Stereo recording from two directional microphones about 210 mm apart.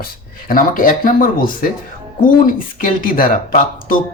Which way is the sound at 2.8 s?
40° left (ahead or behind).